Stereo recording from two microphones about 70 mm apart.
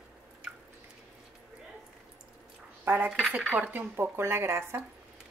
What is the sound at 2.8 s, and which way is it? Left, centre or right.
A woman's voice, right.